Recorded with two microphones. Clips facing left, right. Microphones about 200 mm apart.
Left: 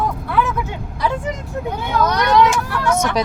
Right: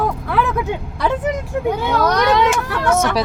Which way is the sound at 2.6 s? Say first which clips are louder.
Right 2 dB; 60° right (ahead or behind).